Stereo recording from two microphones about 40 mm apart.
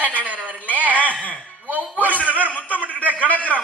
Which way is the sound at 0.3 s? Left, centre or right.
Right.